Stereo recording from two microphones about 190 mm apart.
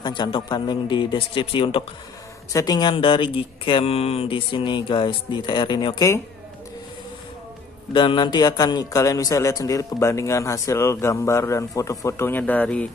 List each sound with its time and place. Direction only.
0.0 s speech: 25° left (ahead or behind)
7.9 s speech: 25° left (ahead or behind); by 12.8 s 10° left (ahead or behind)